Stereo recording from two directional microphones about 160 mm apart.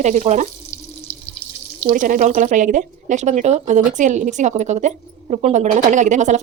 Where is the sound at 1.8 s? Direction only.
55° right (ahead or behind).